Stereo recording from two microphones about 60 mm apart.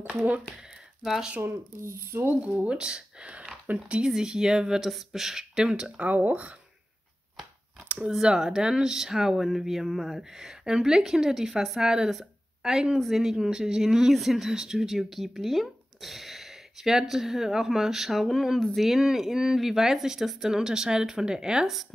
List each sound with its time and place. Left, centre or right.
1.0 s speech: centre
1.4 s speech: right
2.4 s speech: centre
5.9 s speech: right
8.1 s speech: centre